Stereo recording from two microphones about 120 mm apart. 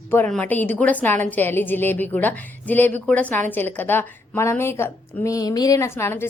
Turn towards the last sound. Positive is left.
turn(degrees=20)  # may be behind; listen again after turning